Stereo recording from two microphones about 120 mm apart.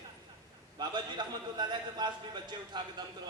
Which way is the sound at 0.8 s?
40° right (ahead or behind).